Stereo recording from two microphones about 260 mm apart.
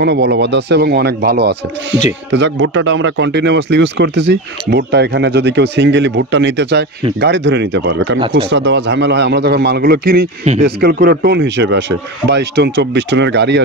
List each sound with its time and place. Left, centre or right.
0.0 s speech: right
10.4 s speech: right
10.8 s speech: right